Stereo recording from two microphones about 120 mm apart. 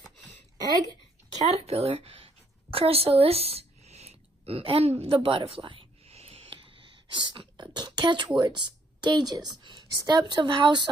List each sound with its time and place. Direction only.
1.5 s speech: 60° right (ahead or behind)
2.7 s a sound: 55° right (ahead or behind)
7.2 s speech: 40° right (ahead or behind)